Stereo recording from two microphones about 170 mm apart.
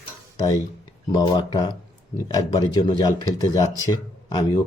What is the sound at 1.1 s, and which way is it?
Speech, 25° left (ahead or behind).